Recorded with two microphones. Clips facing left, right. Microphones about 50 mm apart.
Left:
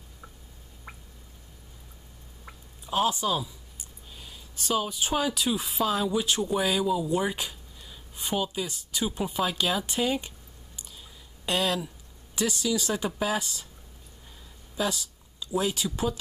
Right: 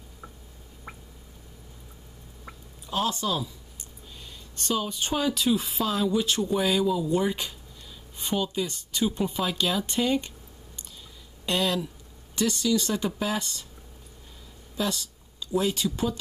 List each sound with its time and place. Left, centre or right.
0.9 s drip: centre
2.9 s speech: centre
11.4 s speech: centre
14.8 s speech: centre